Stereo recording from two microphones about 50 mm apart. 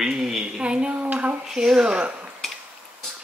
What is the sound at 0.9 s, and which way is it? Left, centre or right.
Dishes, right.